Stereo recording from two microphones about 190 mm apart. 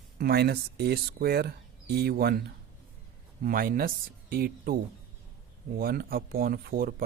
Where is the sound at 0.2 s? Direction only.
55° right (ahead or behind).